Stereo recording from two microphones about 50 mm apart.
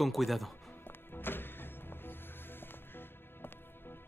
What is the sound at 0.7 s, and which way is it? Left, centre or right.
Music, left.